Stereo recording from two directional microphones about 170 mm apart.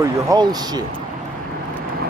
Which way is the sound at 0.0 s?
25° right (ahead or behind).